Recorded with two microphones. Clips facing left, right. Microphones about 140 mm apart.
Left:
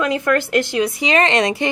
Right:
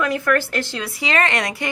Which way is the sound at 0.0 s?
20° left (ahead or behind).